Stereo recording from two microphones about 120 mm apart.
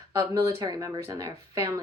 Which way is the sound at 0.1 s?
25° right (ahead or behind).